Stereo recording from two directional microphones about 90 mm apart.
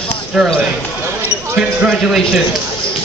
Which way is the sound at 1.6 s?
5° right (ahead or behind).